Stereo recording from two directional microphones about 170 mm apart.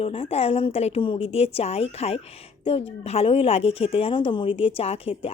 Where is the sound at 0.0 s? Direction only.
35° left (ahead or behind).